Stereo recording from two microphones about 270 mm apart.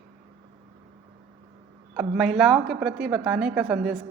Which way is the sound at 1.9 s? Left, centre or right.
Centre.